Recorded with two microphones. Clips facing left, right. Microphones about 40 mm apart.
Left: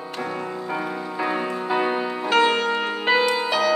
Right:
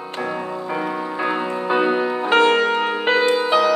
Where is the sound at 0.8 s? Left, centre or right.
Centre.